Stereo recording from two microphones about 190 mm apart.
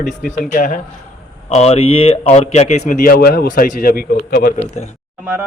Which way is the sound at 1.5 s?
35° left (ahead or behind).